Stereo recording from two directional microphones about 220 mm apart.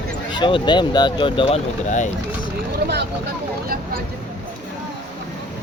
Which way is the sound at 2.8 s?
50° right (ahead or behind).